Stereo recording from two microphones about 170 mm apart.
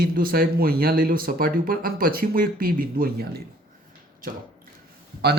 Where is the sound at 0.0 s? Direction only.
60° right (ahead or behind).